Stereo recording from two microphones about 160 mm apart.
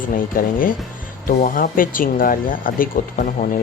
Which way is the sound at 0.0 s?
60° left (ahead or behind).